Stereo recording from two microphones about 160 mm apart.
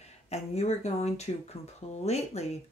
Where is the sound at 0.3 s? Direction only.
40° left (ahead or behind).